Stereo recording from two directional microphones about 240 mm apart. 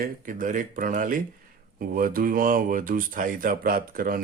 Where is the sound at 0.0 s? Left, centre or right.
Right.